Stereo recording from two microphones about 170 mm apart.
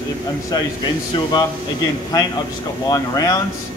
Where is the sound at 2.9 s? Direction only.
20° left (ahead or behind).